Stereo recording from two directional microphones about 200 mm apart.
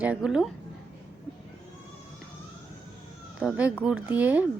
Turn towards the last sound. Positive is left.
turn(degrees=-10)  # may be behind; listen again after turning